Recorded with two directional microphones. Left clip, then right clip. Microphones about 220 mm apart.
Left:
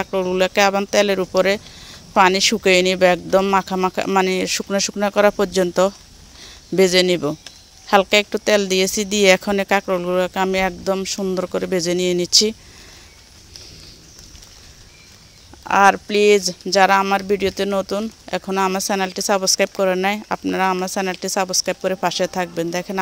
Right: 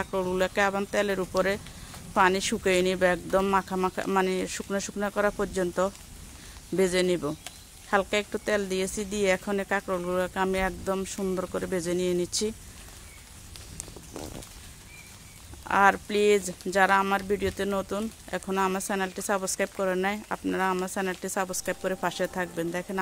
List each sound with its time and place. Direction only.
0.0 s speech: 25° left (ahead or behind)
15.6 s speech: 25° left (ahead or behind)